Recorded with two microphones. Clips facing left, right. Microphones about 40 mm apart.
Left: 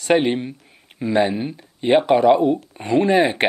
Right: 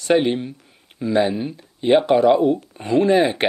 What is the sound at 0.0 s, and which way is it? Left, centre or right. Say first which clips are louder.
Speech: even; centre.